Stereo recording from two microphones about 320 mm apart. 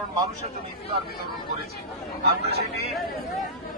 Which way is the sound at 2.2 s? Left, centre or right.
Right.